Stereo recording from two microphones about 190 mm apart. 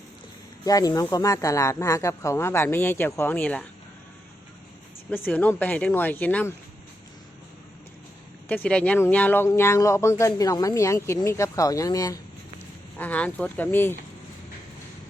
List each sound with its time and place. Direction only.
0.6 s speech: 20° left (ahead or behind)
5.1 s speech: 10° left (ahead or behind)
8.4 s speech: 5° left (ahead or behind)
13.0 s speech: 10° left (ahead or behind)